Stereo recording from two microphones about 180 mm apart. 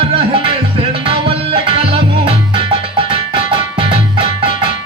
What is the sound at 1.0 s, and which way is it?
Music, 30° right (ahead or behind).